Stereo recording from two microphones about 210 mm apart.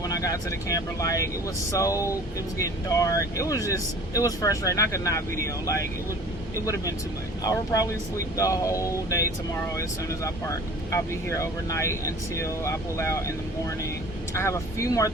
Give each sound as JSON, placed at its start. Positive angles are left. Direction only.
{"t": 0.0, "sound": "speech", "side_deg": 15}
{"t": 7.4, "sound": "speech", "side_deg": 15}
{"t": 10.2, "sound": "speech", "side_deg": 15}